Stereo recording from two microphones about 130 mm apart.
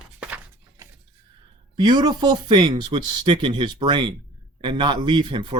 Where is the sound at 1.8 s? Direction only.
35° right (ahead or behind).